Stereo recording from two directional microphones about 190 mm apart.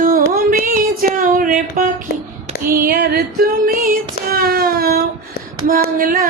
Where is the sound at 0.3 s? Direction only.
45° right (ahead or behind).